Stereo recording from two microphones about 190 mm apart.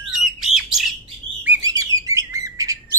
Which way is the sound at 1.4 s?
10° right (ahead or behind).